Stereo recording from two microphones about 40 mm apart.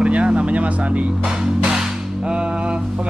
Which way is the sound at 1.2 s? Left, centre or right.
Centre.